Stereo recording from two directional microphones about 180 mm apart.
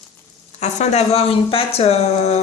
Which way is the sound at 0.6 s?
35° left (ahead or behind).